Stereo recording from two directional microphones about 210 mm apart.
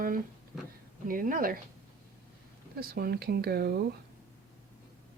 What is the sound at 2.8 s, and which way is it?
Speech, 45° right (ahead or behind).